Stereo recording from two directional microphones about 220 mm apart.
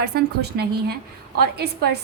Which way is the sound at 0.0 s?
45° right (ahead or behind).